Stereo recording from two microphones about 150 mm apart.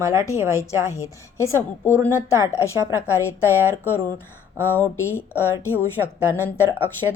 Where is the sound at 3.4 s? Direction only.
15° left (ahead or behind).